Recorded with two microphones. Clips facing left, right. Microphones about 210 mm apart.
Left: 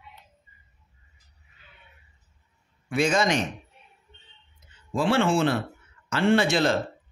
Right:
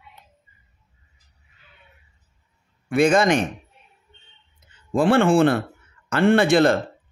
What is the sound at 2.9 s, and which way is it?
Speech, 55° right (ahead or behind).